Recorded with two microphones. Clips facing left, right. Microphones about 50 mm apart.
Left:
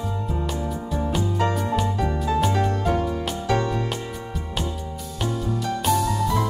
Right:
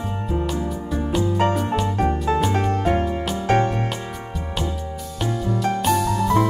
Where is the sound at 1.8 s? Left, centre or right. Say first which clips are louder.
Right 3 dB; right.